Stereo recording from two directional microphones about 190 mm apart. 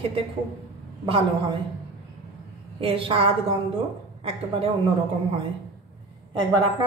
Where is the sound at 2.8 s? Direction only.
30° right (ahead or behind).